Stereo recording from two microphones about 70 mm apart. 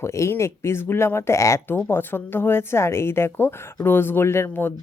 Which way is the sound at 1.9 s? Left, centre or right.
Left.